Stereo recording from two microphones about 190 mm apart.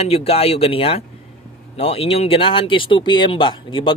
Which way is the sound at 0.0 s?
30° left (ahead or behind).